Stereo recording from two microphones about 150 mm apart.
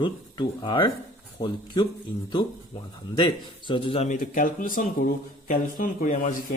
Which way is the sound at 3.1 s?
30° left (ahead or behind).